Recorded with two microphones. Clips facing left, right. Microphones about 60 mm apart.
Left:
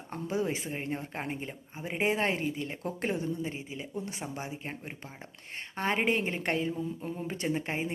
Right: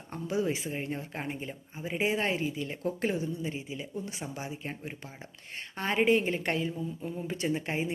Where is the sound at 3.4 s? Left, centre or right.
Left.